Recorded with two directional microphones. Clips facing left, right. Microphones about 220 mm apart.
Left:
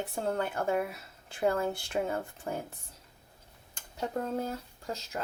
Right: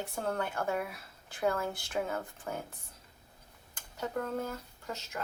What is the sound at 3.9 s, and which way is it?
Speech, 30° left (ahead or behind).